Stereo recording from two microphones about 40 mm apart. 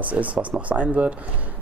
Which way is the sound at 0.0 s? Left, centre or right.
Right.